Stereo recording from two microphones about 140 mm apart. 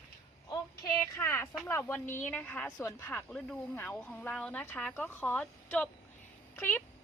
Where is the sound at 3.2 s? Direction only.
5° left (ahead or behind).